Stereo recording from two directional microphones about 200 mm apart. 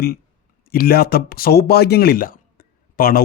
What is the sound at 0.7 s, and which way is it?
Speech, 50° left (ahead or behind).